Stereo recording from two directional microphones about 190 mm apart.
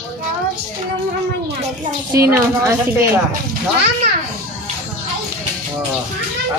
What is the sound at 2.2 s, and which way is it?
Speech, 15° right (ahead or behind).